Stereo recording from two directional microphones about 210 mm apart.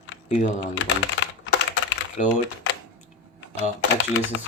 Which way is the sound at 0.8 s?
60° left (ahead or behind).